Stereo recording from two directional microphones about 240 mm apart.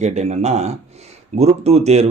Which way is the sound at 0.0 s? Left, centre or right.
Right.